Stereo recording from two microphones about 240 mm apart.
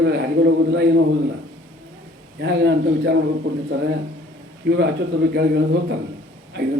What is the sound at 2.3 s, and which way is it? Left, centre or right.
Speech, right.